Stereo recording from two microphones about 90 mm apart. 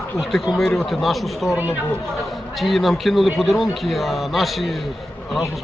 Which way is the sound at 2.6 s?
Centre (ahead or behind).